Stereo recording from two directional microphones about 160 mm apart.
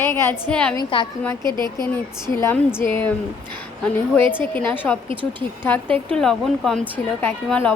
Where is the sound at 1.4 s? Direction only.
25° right (ahead or behind).